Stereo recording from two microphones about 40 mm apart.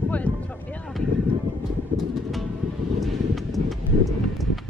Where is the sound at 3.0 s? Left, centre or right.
Centre.